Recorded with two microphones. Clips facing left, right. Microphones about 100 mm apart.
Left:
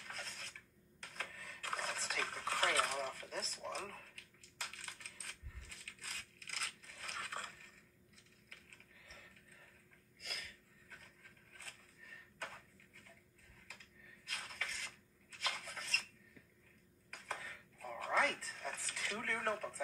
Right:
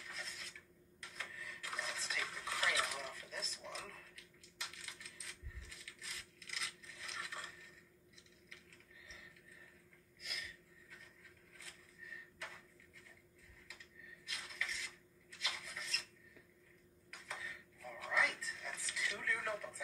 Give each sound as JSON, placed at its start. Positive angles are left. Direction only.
{"t": 0.0, "sound": "filing", "side_deg": 45}
{"t": 1.0, "sound": "dishes", "side_deg": 45}
{"t": 5.2, "sound": "coin", "side_deg": 45}
{"t": 8.5, "sound": "a sound", "side_deg": 50}
{"t": 13.7, "sound": "dishes", "side_deg": 45}
{"t": 17.1, "sound": "a sound", "side_deg": 45}